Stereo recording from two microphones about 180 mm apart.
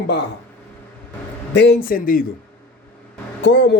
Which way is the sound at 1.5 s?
70° left (ahead or behind).